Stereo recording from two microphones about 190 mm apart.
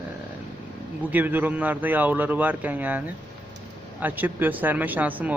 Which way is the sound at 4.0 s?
10° right (ahead or behind).